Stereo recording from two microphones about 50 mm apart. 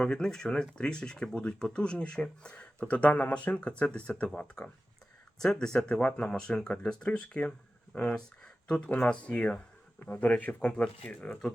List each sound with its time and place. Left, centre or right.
0.0 s speech: centre
5.4 s speech: centre
10.1 s speech: left